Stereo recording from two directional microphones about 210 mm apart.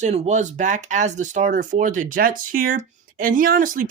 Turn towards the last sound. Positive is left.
turn(degrees=-40)  # may be behind; listen again after turning